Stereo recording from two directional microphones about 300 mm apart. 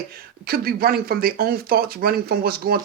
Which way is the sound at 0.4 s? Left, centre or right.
Right.